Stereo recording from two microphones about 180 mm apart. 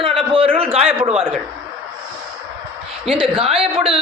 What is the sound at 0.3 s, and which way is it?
Speech, 30° right (ahead or behind).